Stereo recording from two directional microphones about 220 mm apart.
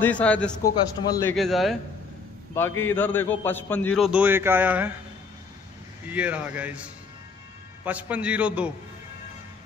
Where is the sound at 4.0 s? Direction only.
5° right (ahead or behind).